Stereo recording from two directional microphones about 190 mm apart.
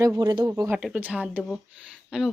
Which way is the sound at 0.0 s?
20° right (ahead or behind).